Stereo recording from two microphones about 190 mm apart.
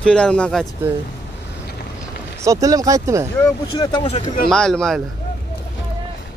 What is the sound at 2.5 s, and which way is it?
Speech, 15° right (ahead or behind).